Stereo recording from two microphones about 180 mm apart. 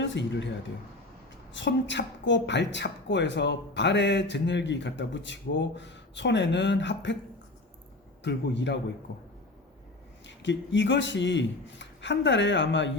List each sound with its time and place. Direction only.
0.0 s speech: 85° left
1.5 s a woman's voice: 80° left
8.2 s a woman's voice: 70° left (ahead or behind)
10.2 s a man's voice: 85° left